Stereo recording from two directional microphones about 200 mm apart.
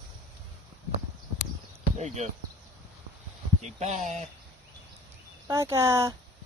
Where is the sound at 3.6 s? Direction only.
35° right (ahead or behind).